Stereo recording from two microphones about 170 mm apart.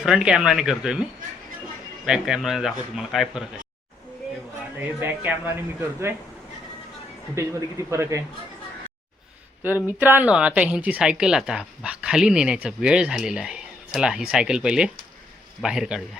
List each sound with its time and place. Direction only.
0.0 s speech: 5° right (ahead or behind)
2.0 s speech: 5° right (ahead or behind)
4.9 s speech: 10° right (ahead or behind)
7.3 s speech: 15° right (ahead or behind)
9.6 s speech: 10° right (ahead or behind)